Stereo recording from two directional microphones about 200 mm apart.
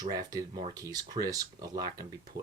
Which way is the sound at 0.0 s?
20° right (ahead or behind).